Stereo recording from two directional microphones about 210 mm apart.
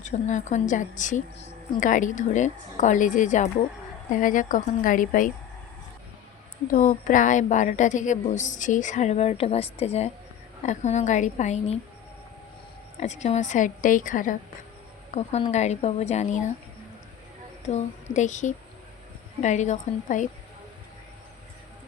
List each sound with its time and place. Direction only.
0.0 s a woman's voice: 35° left (ahead or behind)
6.7 s a woman's voice: 40° left (ahead or behind)
13.0 s a woman's voice: 30° left (ahead or behind)
17.7 s a woman's voice: 35° left (ahead or behind)